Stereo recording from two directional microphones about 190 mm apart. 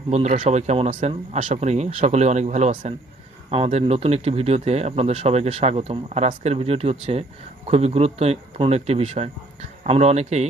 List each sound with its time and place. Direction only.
0.1 s speech: 35° right (ahead or behind)